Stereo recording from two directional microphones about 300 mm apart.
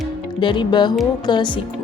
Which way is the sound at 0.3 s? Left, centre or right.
Centre.